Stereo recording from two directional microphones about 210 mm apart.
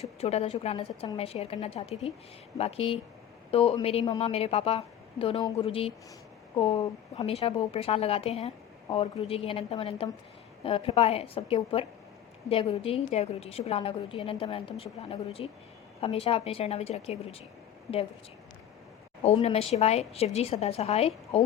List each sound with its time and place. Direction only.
0.0 s a woman's voice: 30° left (ahead or behind)
19.2 s a woman's voice: 30° left (ahead or behind)